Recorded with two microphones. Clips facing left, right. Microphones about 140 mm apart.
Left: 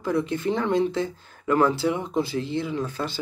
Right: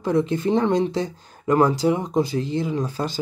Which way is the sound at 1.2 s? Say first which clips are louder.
Right 3 dB; 40° right (ahead or behind).